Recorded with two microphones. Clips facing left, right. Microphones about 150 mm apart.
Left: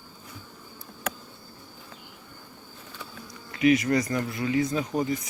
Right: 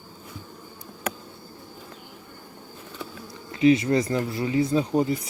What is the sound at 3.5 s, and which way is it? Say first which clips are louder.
Speech: right 3 dB; 25° right (ahead or behind).